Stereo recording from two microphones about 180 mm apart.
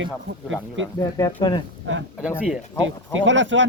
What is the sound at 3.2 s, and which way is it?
Speech, 90° right.